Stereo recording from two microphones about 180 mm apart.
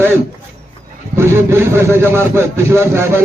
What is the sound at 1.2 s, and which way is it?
Speech, 15° right (ahead or behind).